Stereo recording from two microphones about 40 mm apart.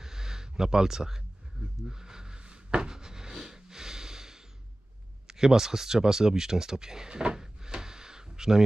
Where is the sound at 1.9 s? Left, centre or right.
Centre.